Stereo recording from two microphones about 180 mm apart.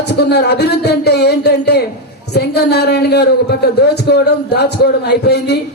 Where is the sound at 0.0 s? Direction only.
65° left (ahead or behind).